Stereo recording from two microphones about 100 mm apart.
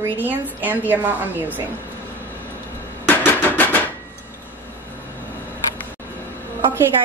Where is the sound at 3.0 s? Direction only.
20° left (ahead or behind).